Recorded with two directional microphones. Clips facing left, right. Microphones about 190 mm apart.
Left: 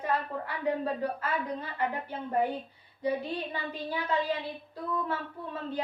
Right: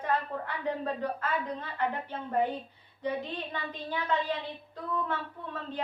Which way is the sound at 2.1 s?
10° left (ahead or behind).